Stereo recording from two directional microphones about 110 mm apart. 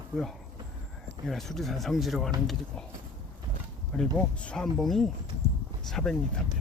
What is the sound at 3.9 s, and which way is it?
Speech, 10° left (ahead or behind).